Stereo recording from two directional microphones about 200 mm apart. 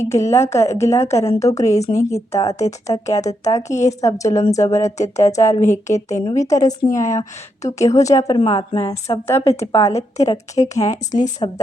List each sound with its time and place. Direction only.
0.0 s a woman's voice: 15° left (ahead or behind)